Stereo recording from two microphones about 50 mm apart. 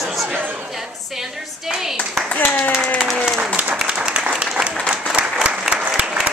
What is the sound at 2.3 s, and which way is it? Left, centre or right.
Speech, left.